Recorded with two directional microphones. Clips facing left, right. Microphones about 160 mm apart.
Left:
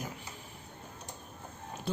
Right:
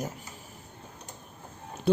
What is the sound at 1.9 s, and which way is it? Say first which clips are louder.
Speech: right 11 dB; 65° right (ahead or behind).